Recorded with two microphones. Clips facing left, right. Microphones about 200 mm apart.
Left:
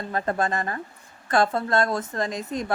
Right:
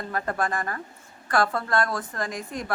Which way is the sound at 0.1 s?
25° left (ahead or behind).